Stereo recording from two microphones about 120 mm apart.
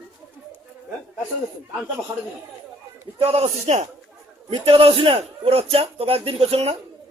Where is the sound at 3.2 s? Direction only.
55° right (ahead or behind).